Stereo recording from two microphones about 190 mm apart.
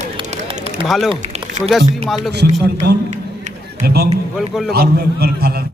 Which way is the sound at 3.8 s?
55° right (ahead or behind).